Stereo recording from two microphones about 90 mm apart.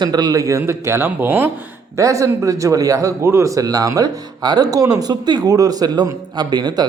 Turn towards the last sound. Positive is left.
turn(degrees=-50)  # may be behind; listen again after turning